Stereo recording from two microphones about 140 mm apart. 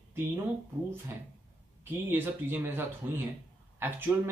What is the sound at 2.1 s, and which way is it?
Speech, 15° right (ahead or behind).